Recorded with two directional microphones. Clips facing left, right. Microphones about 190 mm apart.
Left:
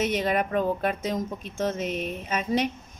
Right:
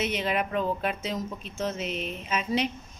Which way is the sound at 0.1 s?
40° left (ahead or behind).